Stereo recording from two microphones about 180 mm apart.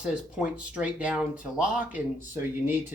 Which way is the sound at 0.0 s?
5° right (ahead or behind).